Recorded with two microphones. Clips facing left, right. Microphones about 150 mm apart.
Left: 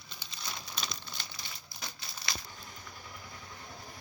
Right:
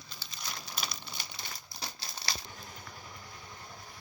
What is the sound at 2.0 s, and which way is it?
Crumpling, 35° right (ahead or behind).